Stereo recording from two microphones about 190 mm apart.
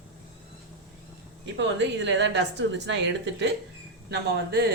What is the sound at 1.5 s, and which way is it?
A woman's voice, 70° right (ahead or behind).